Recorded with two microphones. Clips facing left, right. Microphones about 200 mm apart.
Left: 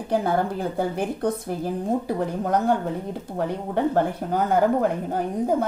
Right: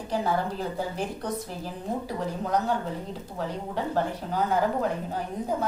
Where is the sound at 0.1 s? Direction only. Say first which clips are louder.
Left 5 dB; 55° left (ahead or behind).